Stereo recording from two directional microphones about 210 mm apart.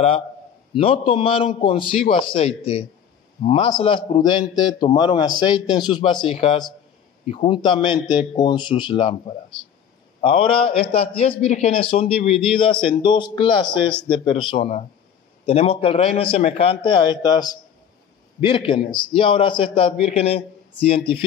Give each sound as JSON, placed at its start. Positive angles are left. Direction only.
{"t": 0.7, "sound": "a man's voice", "side_deg": 25}
{"t": 10.2, "sound": "a man's voice", "side_deg": 25}